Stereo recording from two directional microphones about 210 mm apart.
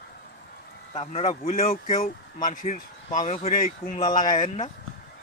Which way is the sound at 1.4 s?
40° left (ahead or behind).